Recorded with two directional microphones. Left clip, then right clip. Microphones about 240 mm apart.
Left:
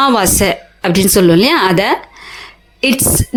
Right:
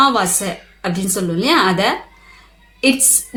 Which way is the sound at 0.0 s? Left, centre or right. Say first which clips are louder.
Left 3 dB; left.